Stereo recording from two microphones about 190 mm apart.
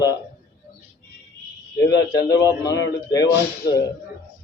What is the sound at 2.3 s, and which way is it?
Speech, 20° left (ahead or behind).